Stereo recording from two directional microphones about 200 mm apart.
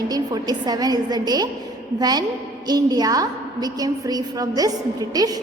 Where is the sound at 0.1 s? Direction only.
20° right (ahead or behind).